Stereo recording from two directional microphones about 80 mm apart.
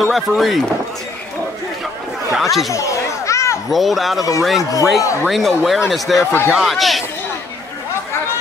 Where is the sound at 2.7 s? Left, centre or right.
Left.